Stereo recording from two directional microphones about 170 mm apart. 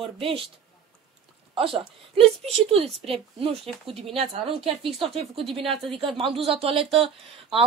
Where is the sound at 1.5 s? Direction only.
35° right (ahead or behind).